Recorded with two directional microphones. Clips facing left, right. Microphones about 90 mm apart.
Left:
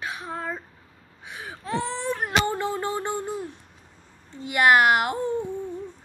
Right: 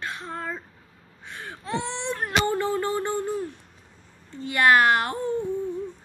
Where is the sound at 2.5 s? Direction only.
20° left (ahead or behind).